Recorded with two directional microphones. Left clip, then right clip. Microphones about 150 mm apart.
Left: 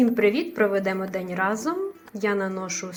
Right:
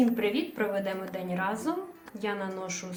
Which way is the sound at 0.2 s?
35° left (ahead or behind).